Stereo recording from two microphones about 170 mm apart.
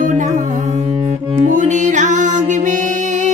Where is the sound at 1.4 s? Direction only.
45° right (ahead or behind).